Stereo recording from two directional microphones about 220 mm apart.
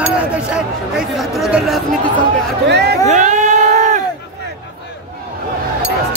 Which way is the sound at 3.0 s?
35° right (ahead or behind).